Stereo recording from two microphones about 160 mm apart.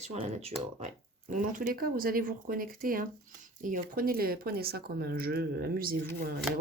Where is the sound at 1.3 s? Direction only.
55° right (ahead or behind).